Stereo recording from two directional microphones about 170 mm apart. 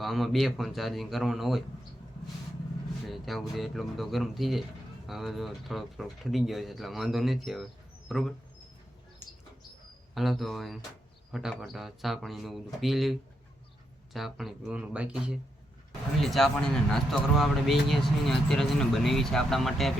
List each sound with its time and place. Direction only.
0.0 s speech: centre (ahead or behind)
3.1 s speech: centre (ahead or behind)
10.2 s speech: centre (ahead or behind)